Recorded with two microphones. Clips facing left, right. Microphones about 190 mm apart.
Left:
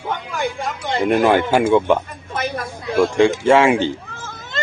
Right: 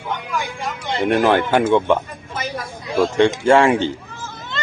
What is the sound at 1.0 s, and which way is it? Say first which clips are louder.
Speech: left 1 dB; 5° left (ahead or behind).